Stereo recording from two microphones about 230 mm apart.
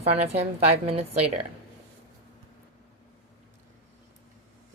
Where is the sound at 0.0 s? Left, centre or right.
Right.